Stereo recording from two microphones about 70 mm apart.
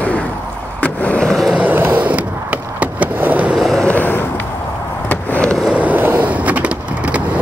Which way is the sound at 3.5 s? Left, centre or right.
Centre.